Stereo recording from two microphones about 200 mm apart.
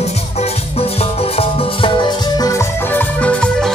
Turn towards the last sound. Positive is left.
turn(degrees=5)  # may be behind; listen again after turning